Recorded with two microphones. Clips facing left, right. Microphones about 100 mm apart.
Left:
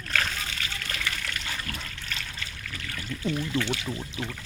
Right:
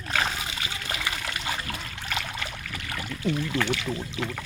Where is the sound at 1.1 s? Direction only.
35° right (ahead or behind).